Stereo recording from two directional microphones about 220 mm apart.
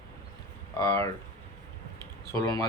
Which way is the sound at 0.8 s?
15° left (ahead or behind).